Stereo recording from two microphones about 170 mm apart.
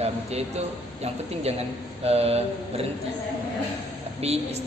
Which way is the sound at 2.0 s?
35° right (ahead or behind).